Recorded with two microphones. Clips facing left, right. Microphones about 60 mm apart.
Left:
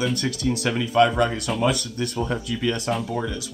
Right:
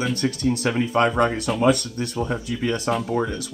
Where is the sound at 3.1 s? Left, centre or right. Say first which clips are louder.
Right 4 dB; right.